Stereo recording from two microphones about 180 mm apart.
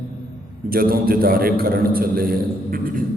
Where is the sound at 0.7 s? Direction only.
55° right (ahead or behind).